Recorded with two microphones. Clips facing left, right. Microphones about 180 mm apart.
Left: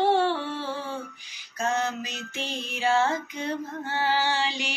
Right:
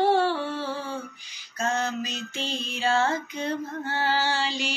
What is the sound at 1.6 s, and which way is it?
Music, 15° left (ahead or behind).